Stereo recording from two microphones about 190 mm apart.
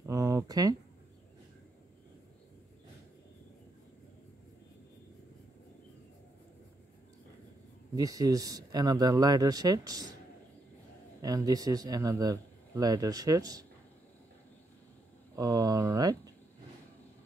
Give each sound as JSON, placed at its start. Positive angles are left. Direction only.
{"t": 0.0, "sound": "a sound", "side_deg": -15}
{"t": 7.9, "sound": "a man's voice", "side_deg": -20}
{"t": 11.1, "sound": "a man's voice", "side_deg": -20}
{"t": 15.3, "sound": "a man's voice", "side_deg": -20}